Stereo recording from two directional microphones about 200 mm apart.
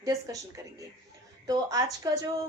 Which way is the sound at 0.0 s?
15° right (ahead or behind).